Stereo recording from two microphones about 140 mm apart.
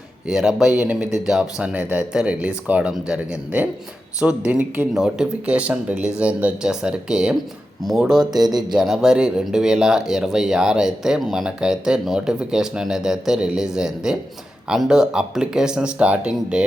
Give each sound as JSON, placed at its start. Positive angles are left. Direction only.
{"t": 0.3, "sound": "speech", "side_deg": -5}
{"t": 8.3, "sound": "speech", "side_deg": -30}
{"t": 8.7, "sound": "speech", "side_deg": -5}